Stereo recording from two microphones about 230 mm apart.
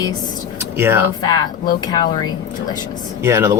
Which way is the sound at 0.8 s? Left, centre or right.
Centre.